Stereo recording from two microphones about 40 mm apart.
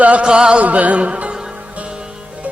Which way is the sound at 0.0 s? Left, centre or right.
Right.